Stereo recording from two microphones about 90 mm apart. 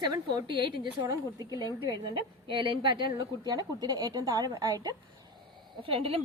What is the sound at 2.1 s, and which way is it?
Speech, 70° right (ahead or behind).